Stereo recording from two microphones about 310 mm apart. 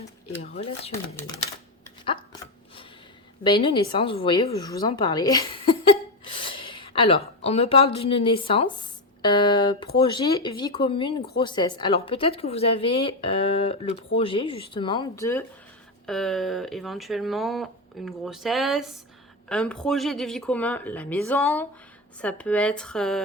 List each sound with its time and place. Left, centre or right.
0.5 s speech: centre
2.0 s chopping: centre
3.4 s a woman's voice: centre